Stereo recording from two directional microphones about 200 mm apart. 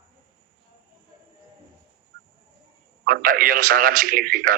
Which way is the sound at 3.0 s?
45° right (ahead or behind).